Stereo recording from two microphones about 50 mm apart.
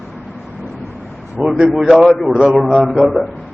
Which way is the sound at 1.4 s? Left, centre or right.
Right.